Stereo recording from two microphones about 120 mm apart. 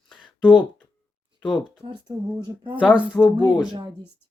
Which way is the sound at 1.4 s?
Centre (ahead or behind).